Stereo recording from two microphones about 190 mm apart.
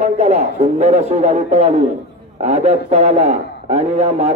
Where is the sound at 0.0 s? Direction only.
35° right (ahead or behind).